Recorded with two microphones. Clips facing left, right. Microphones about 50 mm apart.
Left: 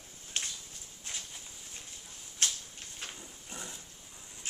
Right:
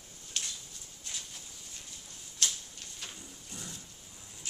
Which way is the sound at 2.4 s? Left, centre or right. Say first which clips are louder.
Even; left.